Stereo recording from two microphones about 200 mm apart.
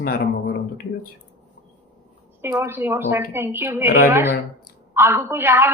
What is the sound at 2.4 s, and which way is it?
A woman's voice, 10° right (ahead or behind).